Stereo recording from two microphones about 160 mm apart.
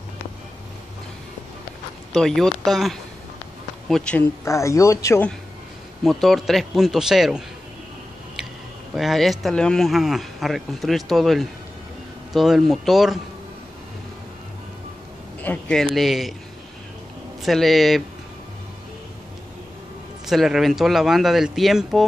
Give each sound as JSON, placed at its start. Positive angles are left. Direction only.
{"t": 2.1, "sound": "speech", "side_deg": 0}
{"t": 4.5, "sound": "speech", "side_deg": 20}
{"t": 6.0, "sound": "speech", "side_deg": 0}
{"t": 8.9, "sound": "speech", "side_deg": 0}
{"t": 15.4, "sound": "speech", "side_deg": 5}
{"t": 17.4, "sound": "speech", "side_deg": 0}
{"t": 20.2, "sound": "speech", "side_deg": 0}